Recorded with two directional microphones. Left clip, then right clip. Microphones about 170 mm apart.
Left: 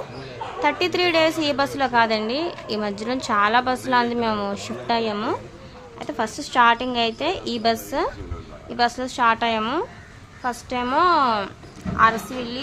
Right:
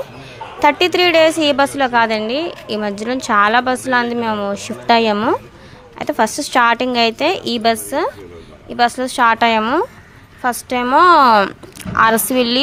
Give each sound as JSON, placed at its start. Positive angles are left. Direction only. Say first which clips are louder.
{"t": 0.6, "sound": "a woman's voice", "louder": "right 8 dB", "side_deg": -35}
{"t": 4.9, "sound": "a woman's voice", "louder": "right 10 dB", "side_deg": -40}
{"t": 11.1, "sound": "speech", "louder": "right 10 dB", "side_deg": -55}
{"t": 11.9, "sound": "a woman's voice", "louder": "right 6 dB", "side_deg": -65}